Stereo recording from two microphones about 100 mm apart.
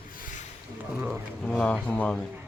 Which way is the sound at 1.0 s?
20° right (ahead or behind).